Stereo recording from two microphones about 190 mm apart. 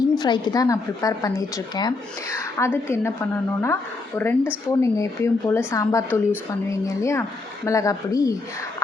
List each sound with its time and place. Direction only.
0.2 s a woman's voice: 20° left (ahead or behind)